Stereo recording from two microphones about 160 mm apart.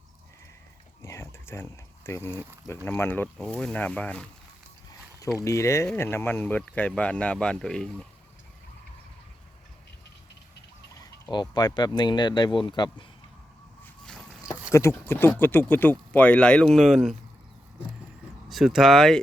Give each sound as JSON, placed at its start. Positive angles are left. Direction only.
{"t": 1.0, "sound": "a sound", "side_deg": 15}
{"t": 2.8, "sound": "speech", "side_deg": 15}
{"t": 5.4, "sound": "speech", "side_deg": 20}
{"t": 11.0, "sound": "speech", "side_deg": 25}
{"t": 14.0, "sound": "boat", "side_deg": 5}
{"t": 14.7, "sound": "speech", "side_deg": 15}
{"t": 18.4, "sound": "speech", "side_deg": 0}